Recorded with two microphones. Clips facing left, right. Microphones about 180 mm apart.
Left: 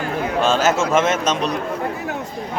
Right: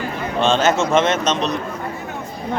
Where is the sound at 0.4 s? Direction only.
5° left (ahead or behind).